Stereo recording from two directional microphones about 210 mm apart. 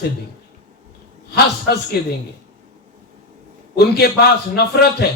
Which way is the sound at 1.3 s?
50° left (ahead or behind).